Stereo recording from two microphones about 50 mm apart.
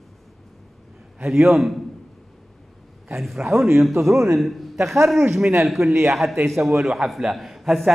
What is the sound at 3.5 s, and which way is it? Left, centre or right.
Speech, right.